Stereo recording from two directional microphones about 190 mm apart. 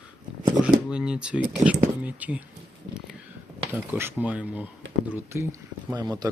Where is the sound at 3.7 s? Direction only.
10° right (ahead or behind).